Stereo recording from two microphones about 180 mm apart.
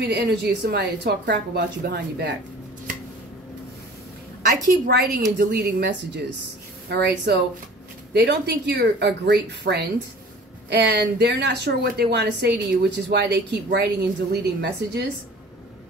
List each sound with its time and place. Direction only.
0.0 s a woman's voice: 65° right (ahead or behind)
4.6 s a woman's voice: 55° right (ahead or behind)